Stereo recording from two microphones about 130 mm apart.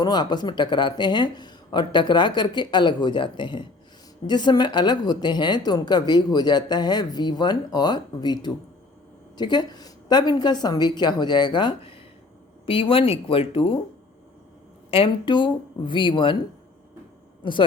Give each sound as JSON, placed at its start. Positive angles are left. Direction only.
{"t": 0.0, "sound": "speech", "side_deg": 35}
{"t": 14.8, "sound": "speech", "side_deg": 45}
{"t": 17.4, "sound": "a woman's voice", "side_deg": 40}